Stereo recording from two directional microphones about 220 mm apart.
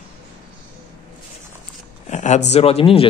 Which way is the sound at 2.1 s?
35° left (ahead or behind).